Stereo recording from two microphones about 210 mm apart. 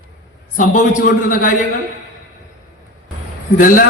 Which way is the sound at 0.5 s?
40° left (ahead or behind).